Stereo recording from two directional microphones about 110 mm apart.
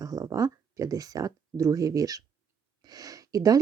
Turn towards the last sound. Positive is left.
turn(degrees=-30)  # may be behind; listen again after turning